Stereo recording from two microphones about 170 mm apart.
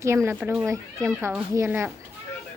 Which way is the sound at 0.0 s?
15° right (ahead or behind).